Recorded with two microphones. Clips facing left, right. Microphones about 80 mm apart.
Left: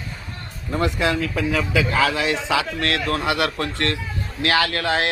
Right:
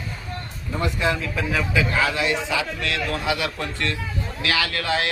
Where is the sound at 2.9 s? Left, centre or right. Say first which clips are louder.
Left 2 dB; left.